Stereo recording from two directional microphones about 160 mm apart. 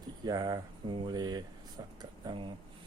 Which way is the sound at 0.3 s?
25° right (ahead or behind).